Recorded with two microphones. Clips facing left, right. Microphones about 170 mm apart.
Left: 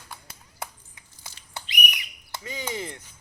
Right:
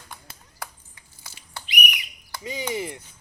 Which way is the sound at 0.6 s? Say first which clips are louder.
Left 1 dB; 20° left (ahead or behind).